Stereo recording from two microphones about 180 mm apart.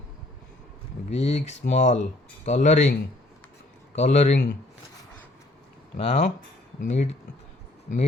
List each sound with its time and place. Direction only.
1.1 s speech: 40° left (ahead or behind)
3.9 s speech: 40° left (ahead or behind)
6.0 s speech: 35° left (ahead or behind)